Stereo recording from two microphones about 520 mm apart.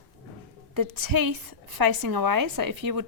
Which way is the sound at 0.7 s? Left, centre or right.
Right.